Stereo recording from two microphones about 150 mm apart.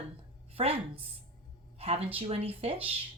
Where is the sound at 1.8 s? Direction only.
40° right (ahead or behind).